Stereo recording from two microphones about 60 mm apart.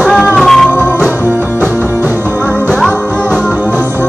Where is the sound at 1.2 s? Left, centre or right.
Right.